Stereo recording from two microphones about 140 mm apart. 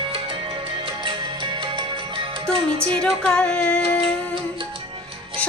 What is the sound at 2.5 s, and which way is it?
Music, 40° right (ahead or behind).